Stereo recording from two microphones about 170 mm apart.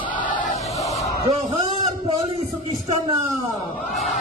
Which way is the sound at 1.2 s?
30° right (ahead or behind).